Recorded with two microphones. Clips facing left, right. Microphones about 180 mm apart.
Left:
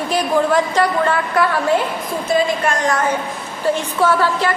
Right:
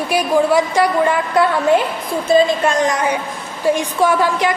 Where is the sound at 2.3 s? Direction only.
25° right (ahead or behind).